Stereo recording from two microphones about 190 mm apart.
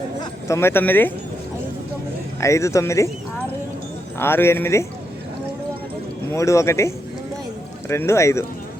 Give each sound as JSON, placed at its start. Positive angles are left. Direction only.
{"t": 0.2, "sound": "speech", "side_deg": 15}
{"t": 2.4, "sound": "speech", "side_deg": 15}
{"t": 4.2, "sound": "speech", "side_deg": 10}
{"t": 6.3, "sound": "speech", "side_deg": 15}